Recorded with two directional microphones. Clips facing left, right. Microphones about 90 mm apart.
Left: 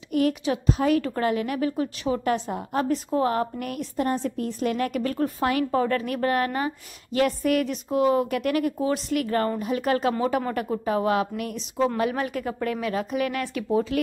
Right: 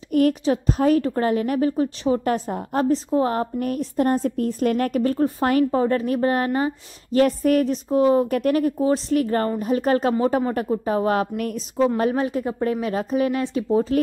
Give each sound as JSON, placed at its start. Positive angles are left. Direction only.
{"t": 0.1, "sound": "a woman's voice", "side_deg": -40}
{"t": 12.0, "sound": "speech", "side_deg": -30}